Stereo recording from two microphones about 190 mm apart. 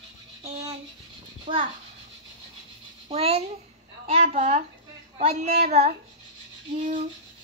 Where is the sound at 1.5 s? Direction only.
25° right (ahead or behind).